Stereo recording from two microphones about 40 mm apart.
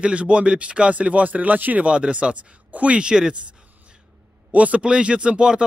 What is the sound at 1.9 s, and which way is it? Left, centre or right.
Speech, right.